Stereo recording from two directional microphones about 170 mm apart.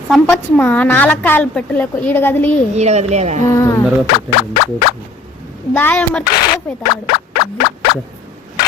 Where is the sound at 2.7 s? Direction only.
40° right (ahead or behind).